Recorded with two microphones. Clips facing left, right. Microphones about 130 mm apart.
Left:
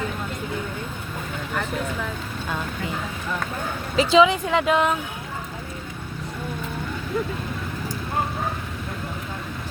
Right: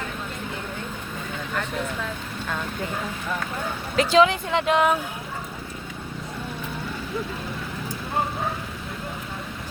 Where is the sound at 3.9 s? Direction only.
Centre (ahead or behind).